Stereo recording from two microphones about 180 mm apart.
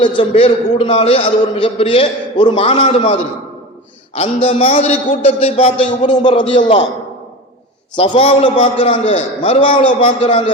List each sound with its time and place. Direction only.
0.2 s a man's voice: 30° left (ahead or behind)
7.9 s a man's voice: 30° left (ahead or behind)